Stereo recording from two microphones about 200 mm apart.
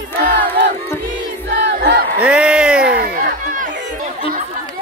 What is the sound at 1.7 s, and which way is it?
Battle cry, 50° right (ahead or behind).